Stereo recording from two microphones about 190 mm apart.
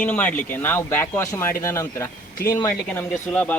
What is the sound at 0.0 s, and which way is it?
Speech, 10° left (ahead or behind).